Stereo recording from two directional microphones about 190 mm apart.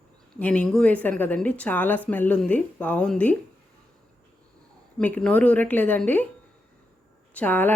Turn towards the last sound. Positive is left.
turn(degrees=10)  # may be behind; listen again after turning